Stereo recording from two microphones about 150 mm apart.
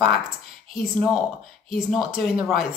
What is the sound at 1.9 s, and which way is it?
Speech, centre (ahead or behind).